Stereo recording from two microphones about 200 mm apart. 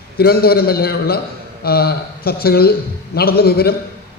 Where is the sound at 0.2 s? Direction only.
50° left (ahead or behind).